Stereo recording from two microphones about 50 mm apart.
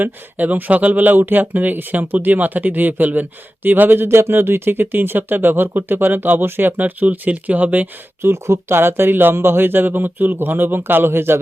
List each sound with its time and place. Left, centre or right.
0.0 s speech: right
8.2 s speech: right